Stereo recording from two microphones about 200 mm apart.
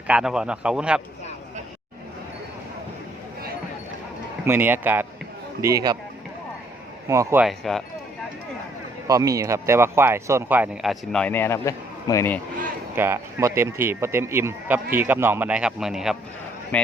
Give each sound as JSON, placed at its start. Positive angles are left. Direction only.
{"t": 0.1, "sound": "a man's voice", "side_deg": -5}
{"t": 4.4, "sound": "speech", "side_deg": -10}
{"t": 7.1, "sound": "speech", "side_deg": -15}
{"t": 7.4, "sound": "a man's voice", "side_deg": 0}
{"t": 9.0, "sound": "speech", "side_deg": -15}
{"t": 11.1, "sound": "a man's voice", "side_deg": 5}
{"t": 13.0, "sound": "a man's voice", "side_deg": -15}